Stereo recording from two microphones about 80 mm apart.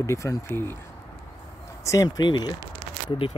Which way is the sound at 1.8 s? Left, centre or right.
Left.